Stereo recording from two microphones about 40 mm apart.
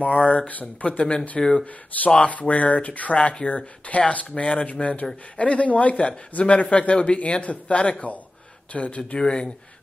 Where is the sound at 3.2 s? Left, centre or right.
Left.